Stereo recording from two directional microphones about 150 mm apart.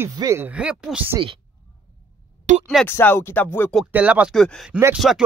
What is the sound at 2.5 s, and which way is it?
Speech, 55° right (ahead or behind).